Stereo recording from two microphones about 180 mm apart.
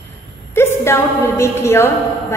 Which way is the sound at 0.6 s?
15° left (ahead or behind).